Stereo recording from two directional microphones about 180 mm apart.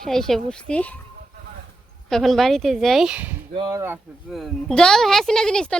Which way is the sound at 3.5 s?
20° right (ahead or behind).